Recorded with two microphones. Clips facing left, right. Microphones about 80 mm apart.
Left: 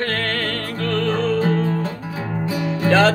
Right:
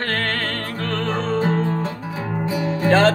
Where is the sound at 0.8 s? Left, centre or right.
Right.